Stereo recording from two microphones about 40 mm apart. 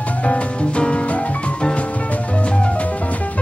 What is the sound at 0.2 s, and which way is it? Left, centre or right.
Music, left.